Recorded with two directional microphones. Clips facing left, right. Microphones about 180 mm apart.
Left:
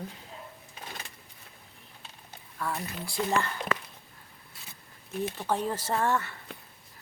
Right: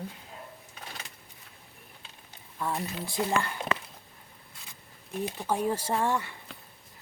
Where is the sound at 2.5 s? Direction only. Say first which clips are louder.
Right 2 dB; 20° right (ahead or behind).